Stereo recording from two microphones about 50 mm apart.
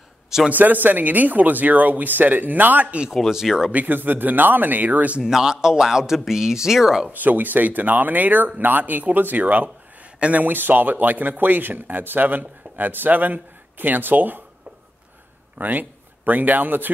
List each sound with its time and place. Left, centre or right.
0.5 s speech: right
3.1 s speech: centre
3.7 s speech: right
5.2 s speech: centre
7.1 s speech: right
15.5 s a man's voice: right